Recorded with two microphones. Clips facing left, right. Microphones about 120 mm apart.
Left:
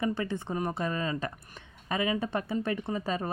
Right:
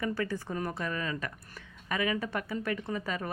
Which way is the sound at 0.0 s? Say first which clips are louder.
Left 2 dB; 25° left (ahead or behind).